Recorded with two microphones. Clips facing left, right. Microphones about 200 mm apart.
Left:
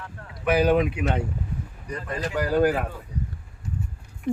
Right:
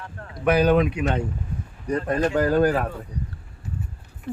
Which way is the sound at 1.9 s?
50° right (ahead or behind).